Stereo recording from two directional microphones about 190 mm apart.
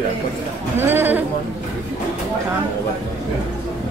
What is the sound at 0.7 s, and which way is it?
Speech, 10° right (ahead or behind).